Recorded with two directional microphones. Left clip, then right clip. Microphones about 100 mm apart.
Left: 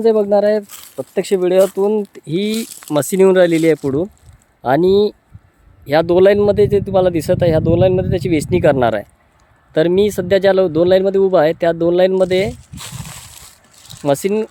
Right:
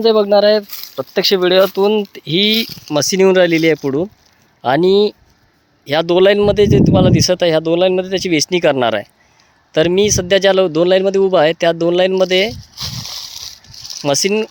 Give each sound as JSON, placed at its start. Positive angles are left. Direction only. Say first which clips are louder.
{"t": 0.0, "sound": "speech", "louder": "right 2 dB", "side_deg": 15}
{"t": 0.7, "sound": "a sound", "louder": "right 3 dB", "side_deg": -15}
{"t": 1.1, "sound": "speech", "louder": "right 3 dB", "side_deg": 10}
{"t": 1.5, "sound": "speech", "louder": "even", "side_deg": -5}
{"t": 2.2, "sound": "speech", "louder": "right 6 dB", "side_deg": 10}
{"t": 12.7, "sound": "slosh", "louder": "right 8 dB", "side_deg": -30}
{"t": 13.8, "sound": "speech", "louder": "right 1 dB", "side_deg": 10}